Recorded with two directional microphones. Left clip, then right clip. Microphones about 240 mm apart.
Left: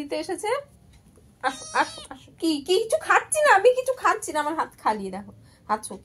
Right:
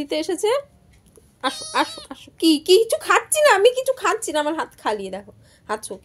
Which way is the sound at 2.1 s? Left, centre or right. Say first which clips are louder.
Right 8 dB; right.